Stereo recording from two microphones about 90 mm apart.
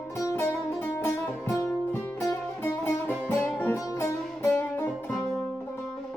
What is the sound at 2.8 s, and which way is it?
Music, 25° left (ahead or behind).